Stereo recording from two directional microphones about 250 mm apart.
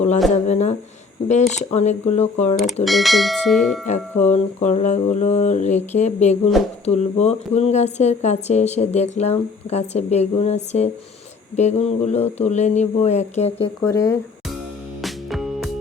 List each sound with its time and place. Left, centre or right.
0.3 s speech: left
2.8 s speech: centre
4.3 s speech: left
13.9 s speech: centre
15.0 s music: centre